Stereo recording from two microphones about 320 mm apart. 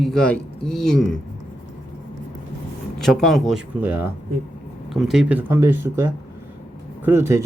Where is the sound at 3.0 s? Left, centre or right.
Centre.